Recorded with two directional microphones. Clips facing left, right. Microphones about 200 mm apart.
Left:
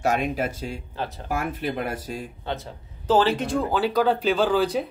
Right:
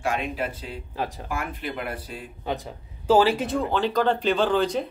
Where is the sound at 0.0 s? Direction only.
40° left (ahead or behind).